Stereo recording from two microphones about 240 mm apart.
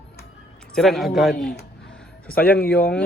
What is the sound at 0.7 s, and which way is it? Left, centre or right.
Speech, centre.